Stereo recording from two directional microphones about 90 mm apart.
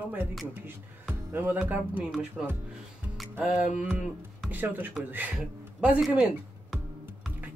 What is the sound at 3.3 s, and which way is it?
Speech, 15° right (ahead or behind).